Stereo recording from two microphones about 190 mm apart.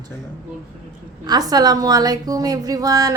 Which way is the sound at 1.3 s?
20° right (ahead or behind).